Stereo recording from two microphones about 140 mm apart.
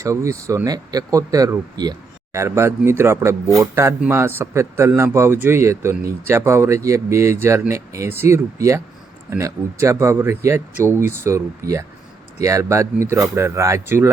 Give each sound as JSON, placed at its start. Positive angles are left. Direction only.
{"t": 0.0, "sound": "a man's voice", "side_deg": -20}